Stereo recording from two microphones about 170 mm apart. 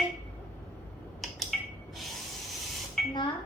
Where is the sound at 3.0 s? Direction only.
Centre (ahead or behind).